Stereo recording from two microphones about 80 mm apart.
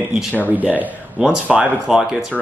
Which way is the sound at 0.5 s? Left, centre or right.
Right.